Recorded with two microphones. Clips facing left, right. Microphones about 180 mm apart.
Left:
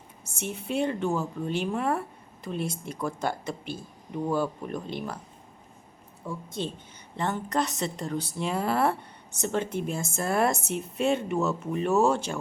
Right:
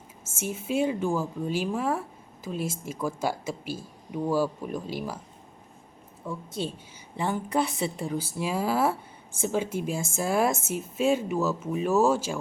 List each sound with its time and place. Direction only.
0.3 s speech: 5° right (ahead or behind)
6.2 s speech: 5° right (ahead or behind)